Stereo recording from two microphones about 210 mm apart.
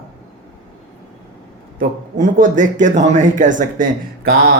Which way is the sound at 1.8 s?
40° right (ahead or behind).